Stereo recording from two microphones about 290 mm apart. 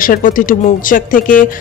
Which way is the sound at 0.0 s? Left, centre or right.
Left.